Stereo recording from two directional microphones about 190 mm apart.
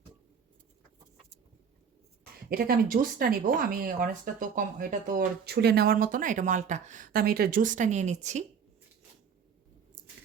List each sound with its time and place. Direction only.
2.5 s speech: 50° right (ahead or behind)